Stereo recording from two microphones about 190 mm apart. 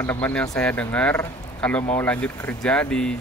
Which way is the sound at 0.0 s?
10° left (ahead or behind).